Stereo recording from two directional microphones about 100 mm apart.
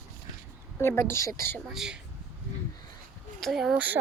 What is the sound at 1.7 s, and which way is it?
Speech, 5° right (ahead or behind).